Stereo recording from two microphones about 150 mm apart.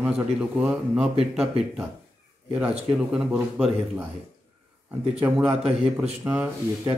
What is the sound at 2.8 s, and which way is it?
A man's voice, 5° right (ahead or behind).